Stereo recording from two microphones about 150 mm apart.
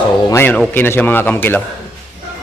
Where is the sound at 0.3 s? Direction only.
15° left (ahead or behind).